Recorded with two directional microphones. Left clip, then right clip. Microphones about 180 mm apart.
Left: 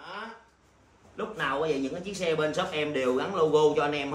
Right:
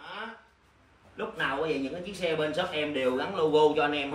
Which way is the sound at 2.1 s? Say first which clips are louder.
Left 2 dB; 20° left (ahead or behind).